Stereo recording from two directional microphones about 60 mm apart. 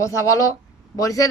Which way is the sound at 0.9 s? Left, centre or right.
Left.